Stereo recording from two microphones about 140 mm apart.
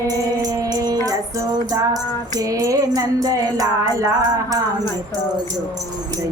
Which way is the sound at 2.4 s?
25° right (ahead or behind).